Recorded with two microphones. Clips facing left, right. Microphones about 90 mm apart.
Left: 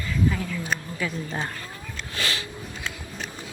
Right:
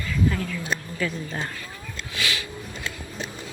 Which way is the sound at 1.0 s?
15° left (ahead or behind).